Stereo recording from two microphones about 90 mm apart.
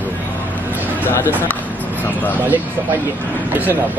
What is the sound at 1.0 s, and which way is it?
Speech, 25° left (ahead or behind).